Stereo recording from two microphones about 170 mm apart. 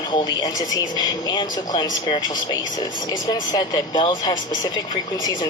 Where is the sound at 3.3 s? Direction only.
25° left (ahead or behind).